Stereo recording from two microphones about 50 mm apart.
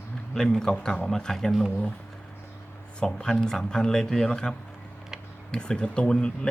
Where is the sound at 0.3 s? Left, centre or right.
Centre.